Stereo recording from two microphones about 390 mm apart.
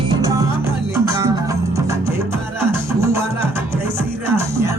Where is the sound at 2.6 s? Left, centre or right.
Centre.